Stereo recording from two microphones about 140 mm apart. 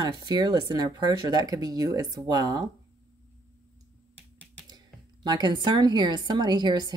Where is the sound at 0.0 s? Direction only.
30° right (ahead or behind).